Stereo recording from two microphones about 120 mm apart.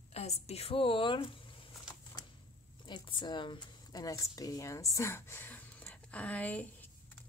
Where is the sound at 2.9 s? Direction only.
40° left (ahead or behind).